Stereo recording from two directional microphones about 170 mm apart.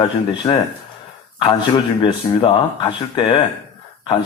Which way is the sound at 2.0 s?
30° left (ahead or behind).